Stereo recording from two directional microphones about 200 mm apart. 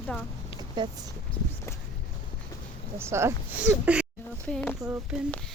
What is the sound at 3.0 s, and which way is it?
Speech, 15° right (ahead or behind).